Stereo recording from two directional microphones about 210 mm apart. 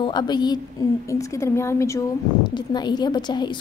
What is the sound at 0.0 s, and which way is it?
A woman's voice, 20° left (ahead or behind).